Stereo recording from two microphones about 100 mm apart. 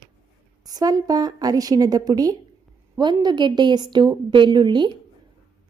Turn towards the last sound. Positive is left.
turn(degrees=-50)  # may be behind; listen again after turning